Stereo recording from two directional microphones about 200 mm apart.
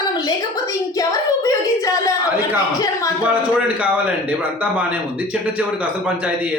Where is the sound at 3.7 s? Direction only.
5° right (ahead or behind).